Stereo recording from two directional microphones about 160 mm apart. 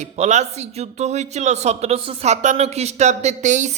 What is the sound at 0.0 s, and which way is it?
A man's voice, 45° right (ahead or behind).